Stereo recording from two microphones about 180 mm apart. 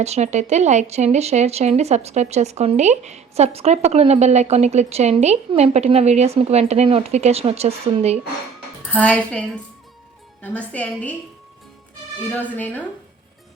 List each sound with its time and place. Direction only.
0.0 s speech: 40° right (ahead or behind)
8.9 s a woman's voice: 5° left (ahead or behind)
10.4 s a woman's voice: 5° left (ahead or behind)
12.3 s a woman's voice: 10° left (ahead or behind)